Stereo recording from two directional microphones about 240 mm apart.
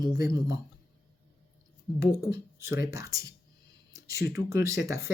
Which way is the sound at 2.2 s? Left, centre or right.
Centre.